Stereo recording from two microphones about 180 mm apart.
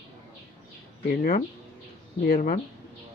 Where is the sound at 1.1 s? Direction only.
40° left (ahead or behind).